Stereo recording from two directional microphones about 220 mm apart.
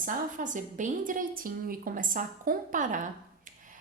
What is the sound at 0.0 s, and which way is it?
A woman's voice, 35° right (ahead or behind).